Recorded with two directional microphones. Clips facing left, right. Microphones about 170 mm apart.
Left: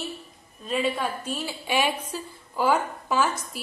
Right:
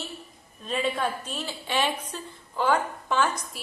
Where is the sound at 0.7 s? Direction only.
5° left (ahead or behind).